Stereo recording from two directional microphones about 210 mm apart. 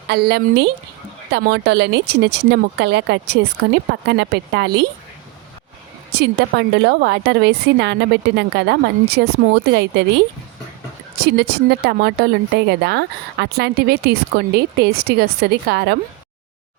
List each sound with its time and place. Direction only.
0.1 s speech: 55° right (ahead or behind)
6.4 s speech: 55° right (ahead or behind)